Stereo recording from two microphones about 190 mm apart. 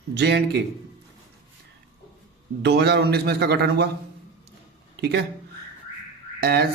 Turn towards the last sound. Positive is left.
turn(degrees=-55)  # may be behind; listen again after turning